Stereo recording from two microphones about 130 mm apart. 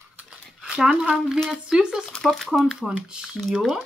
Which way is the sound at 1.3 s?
Centre (ahead or behind).